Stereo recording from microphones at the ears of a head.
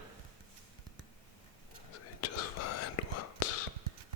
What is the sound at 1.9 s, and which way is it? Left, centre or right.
Whispering, left.